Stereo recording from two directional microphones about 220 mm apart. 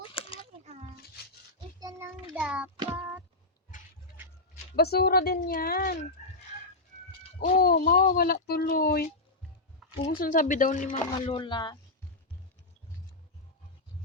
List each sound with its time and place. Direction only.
0.1 s a sound: 25° left (ahead or behind)
0.6 s a sound: 30° right (ahead or behind)
1.8 s child singing: 15° right (ahead or behind)
4.8 s speech: 45° left (ahead or behind)
7.3 s speech: 40° left (ahead or behind)
11.3 s speech: 20° left (ahead or behind)